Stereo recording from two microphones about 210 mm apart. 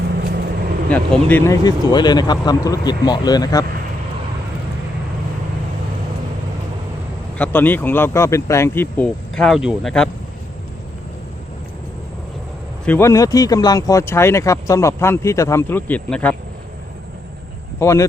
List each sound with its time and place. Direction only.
0.9 s speech: 5° left (ahead or behind)
7.3 s speech: 5° left (ahead or behind)
12.8 s speech: 10° left (ahead or behind)
17.7 s speech: 15° left (ahead or behind)